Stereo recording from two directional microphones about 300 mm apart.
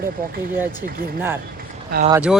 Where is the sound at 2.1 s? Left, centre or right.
Centre.